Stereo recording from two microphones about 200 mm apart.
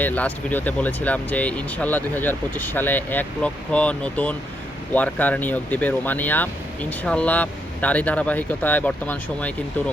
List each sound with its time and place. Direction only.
0.0 s speech: 10° left (ahead or behind)